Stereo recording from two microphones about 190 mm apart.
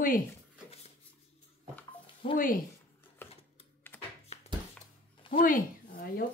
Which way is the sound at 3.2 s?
15° left (ahead or behind).